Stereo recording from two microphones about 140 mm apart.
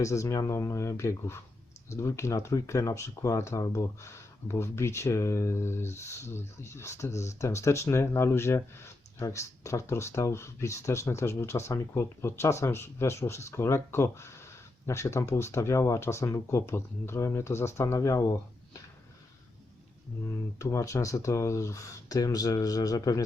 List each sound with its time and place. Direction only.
0.0 s speech: 20° left (ahead or behind)
20.6 s speech: 20° left (ahead or behind)